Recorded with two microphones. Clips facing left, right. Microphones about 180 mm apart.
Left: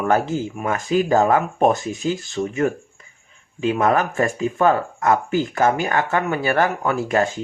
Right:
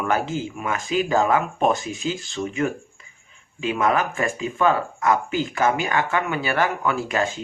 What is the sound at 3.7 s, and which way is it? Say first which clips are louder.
Speech: left 2 dB; 50° left (ahead or behind).